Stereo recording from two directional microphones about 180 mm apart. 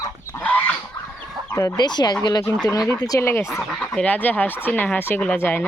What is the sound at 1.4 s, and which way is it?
Speech, 10° left (ahead or behind).